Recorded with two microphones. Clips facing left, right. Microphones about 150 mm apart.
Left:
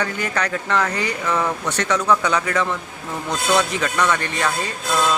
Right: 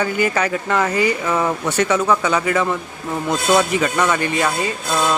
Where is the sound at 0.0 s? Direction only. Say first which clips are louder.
Right 5 dB; 5° right (ahead or behind).